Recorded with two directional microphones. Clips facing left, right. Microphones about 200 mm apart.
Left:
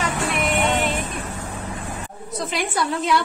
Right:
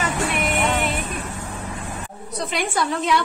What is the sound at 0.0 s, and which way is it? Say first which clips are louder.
Music: even; centre (ahead or behind).